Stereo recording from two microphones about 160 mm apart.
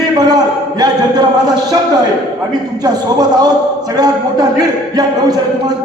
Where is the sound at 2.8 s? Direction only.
25° right (ahead or behind).